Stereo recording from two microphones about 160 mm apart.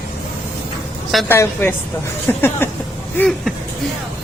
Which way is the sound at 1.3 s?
15° left (ahead or behind).